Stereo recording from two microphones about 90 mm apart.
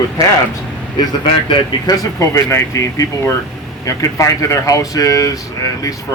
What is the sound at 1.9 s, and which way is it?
Speech, 40° left (ahead or behind).